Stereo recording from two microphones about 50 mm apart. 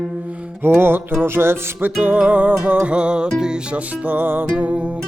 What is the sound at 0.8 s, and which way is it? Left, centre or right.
Music, right.